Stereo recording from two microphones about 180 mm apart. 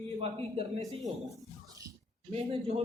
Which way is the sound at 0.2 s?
35° right (ahead or behind).